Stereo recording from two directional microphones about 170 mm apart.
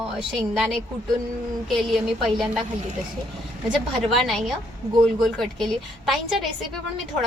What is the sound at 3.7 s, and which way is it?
A woman's voice, centre (ahead or behind).